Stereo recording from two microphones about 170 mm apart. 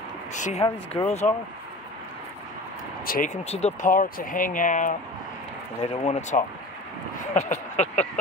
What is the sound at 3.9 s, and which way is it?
Speech, 55° left (ahead or behind).